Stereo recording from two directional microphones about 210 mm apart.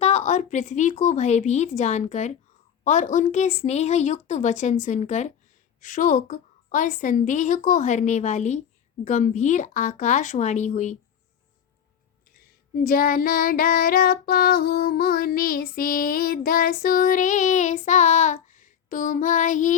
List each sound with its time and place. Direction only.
0.0 s a woman's voice: 30° left (ahead or behind)
12.7 s child singing: 45° left (ahead or behind)